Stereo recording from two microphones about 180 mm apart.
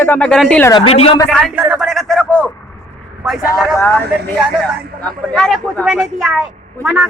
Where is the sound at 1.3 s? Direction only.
Centre (ahead or behind).